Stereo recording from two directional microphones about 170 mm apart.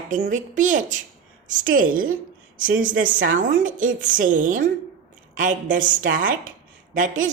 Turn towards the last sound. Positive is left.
turn(degrees=-50)  # may be behind; listen again after turning